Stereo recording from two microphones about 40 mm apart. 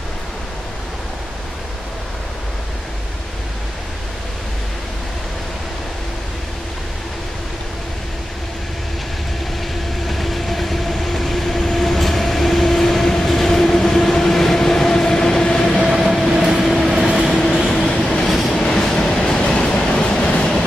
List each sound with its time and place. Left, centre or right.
10.0 s train: centre; by 15.7 s left
16.0 s train: centre
17.3 s train: centre
18.2 s vehicle: centre
18.6 s train: centre